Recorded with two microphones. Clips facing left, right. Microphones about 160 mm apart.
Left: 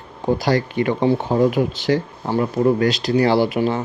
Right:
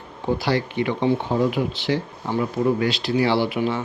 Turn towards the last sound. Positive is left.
turn(degrees=35)  # may be behind; listen again after turning